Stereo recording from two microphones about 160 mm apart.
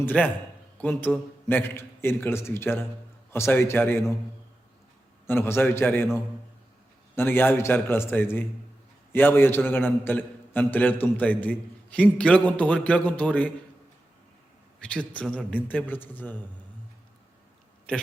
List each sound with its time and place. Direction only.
0.0 s a man's voice: 10° left (ahead or behind)
5.2 s a man's voice: 15° left (ahead or behind)
7.2 s a man's voice: 10° left (ahead or behind)
14.8 s a man's voice: 5° left (ahead or behind)